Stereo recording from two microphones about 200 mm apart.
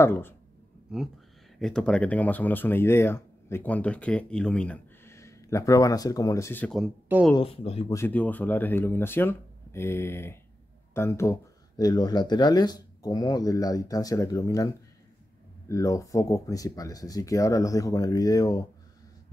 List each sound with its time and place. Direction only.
0.0 s speech: 10° left (ahead or behind)
1.6 s speech: 5° left (ahead or behind)
6.8 s speech: 5° right (ahead or behind)
7.3 s speech: 30° left (ahead or behind)
7.9 s speech: 10° left (ahead or behind)
15.7 s speech: 15° left (ahead or behind)